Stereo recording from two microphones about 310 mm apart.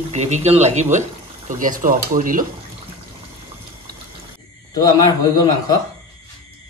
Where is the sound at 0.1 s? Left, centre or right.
Right.